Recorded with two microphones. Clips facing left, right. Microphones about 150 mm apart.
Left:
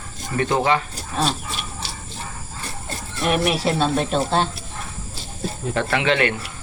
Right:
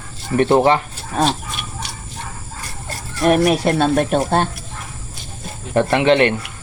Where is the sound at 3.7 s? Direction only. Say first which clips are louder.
Right 4 dB; 55° right (ahead or behind).